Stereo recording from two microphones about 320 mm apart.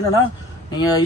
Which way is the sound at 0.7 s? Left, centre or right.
Centre.